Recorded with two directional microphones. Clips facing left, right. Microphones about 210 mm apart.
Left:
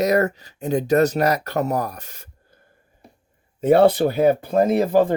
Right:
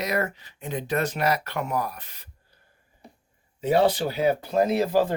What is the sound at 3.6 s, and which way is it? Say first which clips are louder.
Speech: left 7 dB; 55° left (ahead or behind).